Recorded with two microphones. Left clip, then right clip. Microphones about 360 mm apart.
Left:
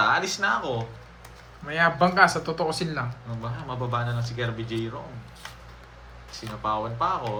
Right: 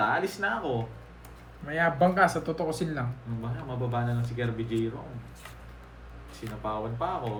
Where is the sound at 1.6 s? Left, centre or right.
Centre.